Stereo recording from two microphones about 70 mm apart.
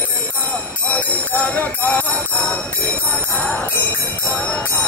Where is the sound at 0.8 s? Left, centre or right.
Left.